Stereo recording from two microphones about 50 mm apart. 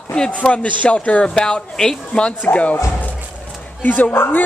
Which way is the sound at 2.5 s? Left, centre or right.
Left.